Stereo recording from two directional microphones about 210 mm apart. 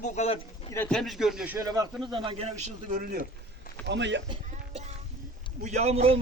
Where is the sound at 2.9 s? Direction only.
40° right (ahead or behind).